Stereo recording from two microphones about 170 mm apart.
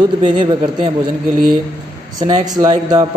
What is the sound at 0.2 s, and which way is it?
Speech, 25° right (ahead or behind).